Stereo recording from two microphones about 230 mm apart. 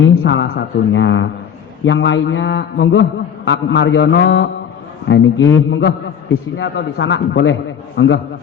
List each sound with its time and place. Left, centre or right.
0.2 s a man's voice: left